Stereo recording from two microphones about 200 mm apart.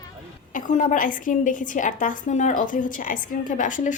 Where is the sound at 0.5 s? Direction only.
40° left (ahead or behind).